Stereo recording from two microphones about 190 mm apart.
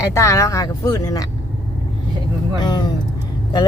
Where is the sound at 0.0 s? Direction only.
15° left (ahead or behind).